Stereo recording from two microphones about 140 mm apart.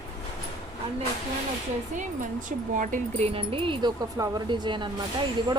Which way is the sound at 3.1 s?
45° right (ahead or behind).